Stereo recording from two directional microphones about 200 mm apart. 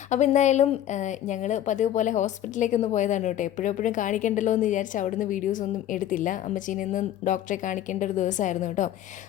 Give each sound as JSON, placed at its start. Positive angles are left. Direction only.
{"t": 0.1, "sound": "a woman's voice", "side_deg": 35}